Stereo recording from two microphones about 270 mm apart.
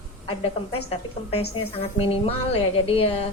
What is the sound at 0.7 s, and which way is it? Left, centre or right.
A woman's voice, left.